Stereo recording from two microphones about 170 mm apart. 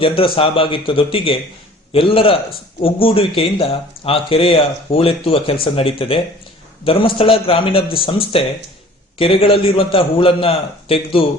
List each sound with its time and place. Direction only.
0.0 s speech: 30° left (ahead or behind)